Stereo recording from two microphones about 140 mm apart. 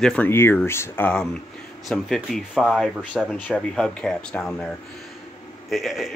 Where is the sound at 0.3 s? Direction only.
15° left (ahead or behind).